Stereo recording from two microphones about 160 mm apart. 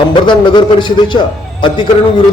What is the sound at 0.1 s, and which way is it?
A man's voice, 30° left (ahead or behind).